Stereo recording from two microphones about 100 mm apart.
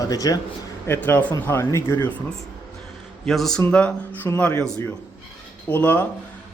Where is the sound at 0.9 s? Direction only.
20° left (ahead or behind).